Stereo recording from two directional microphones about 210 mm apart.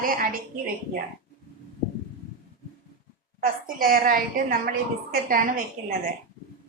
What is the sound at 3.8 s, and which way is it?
Speech, 45° right (ahead or behind).